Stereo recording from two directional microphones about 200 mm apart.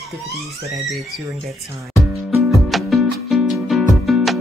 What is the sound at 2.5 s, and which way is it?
Music, centre (ahead or behind).